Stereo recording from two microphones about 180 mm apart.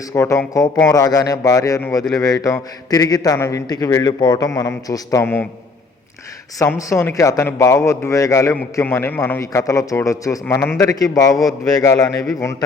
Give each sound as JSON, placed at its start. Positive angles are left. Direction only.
{"t": 0.1, "sound": "a man's voice", "side_deg": 15}
{"t": 6.6, "sound": "a man's voice", "side_deg": 20}